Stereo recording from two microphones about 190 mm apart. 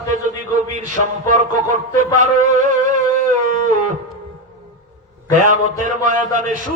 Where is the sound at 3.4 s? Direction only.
45° right (ahead or behind).